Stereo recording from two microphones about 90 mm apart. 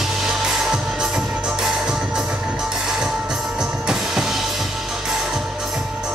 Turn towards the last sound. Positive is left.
turn(degrees=-5)  # may be behind; listen again after turning